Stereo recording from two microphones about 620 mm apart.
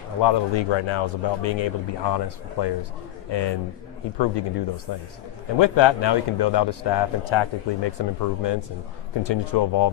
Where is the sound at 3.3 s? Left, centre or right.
Left.